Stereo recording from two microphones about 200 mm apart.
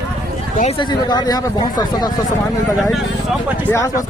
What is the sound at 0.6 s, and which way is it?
Speech, 30° left (ahead or behind).